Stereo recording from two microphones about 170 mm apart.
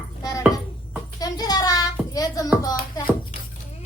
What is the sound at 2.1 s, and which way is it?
Speech, 20° left (ahead or behind).